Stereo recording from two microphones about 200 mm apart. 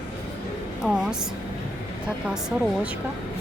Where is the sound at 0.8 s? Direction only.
5° right (ahead or behind).